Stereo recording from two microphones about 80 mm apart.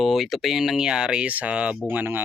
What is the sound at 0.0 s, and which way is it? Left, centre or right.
Speech, centre.